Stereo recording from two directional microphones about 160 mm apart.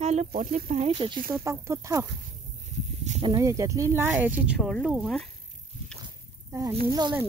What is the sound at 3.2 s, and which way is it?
Speech, 20° right (ahead or behind).